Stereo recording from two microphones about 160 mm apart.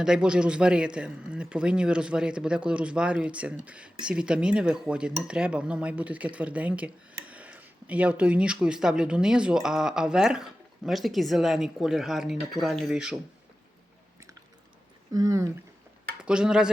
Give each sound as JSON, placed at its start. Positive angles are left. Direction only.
{"t": 0.0, "sound": "speech", "side_deg": -5}
{"t": 15.1, "sound": "speech", "side_deg": -20}
{"t": 16.2, "sound": "speech", "side_deg": -5}